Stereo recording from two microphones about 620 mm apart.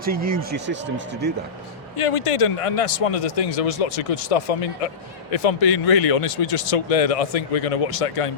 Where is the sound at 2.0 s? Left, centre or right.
Left.